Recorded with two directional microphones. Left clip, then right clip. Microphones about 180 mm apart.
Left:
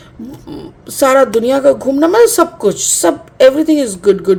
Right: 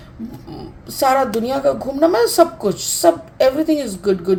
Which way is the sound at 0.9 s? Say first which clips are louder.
Left 6 dB; 50° left (ahead or behind).